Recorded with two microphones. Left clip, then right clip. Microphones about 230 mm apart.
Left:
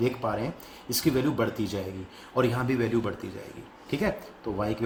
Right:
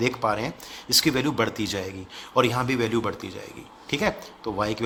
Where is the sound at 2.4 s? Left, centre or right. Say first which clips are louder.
Right 4 dB; right.